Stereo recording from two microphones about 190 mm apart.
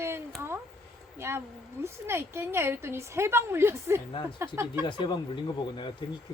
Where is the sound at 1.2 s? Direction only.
15° right (ahead or behind).